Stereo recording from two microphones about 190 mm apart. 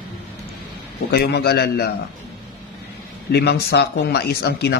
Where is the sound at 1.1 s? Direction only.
55° left (ahead or behind).